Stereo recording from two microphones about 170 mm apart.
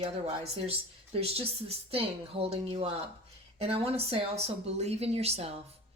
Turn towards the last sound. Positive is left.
turn(degrees=-35)  # may be behind; listen again after turning